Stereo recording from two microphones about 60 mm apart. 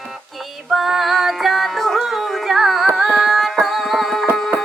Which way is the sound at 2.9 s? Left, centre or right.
Centre.